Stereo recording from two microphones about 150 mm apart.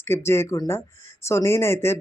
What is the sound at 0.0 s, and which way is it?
Speech, 15° left (ahead or behind).